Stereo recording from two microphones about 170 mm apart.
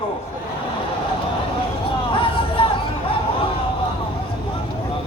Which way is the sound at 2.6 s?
30° left (ahead or behind).